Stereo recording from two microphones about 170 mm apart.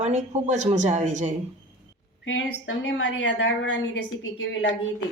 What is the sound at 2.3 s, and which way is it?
A woman's voice, 90° left.